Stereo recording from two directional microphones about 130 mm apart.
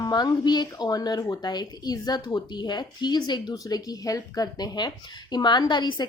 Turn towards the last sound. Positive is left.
turn(degrees=35)  # may be behind; listen again after turning